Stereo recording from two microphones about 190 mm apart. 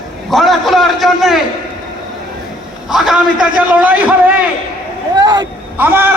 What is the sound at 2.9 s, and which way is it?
A man's voice, 5° right (ahead or behind).